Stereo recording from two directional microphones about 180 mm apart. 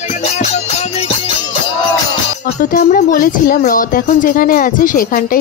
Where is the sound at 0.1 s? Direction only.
35° left (ahead or behind).